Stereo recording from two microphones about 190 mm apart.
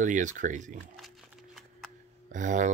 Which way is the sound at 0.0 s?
40° right (ahead or behind).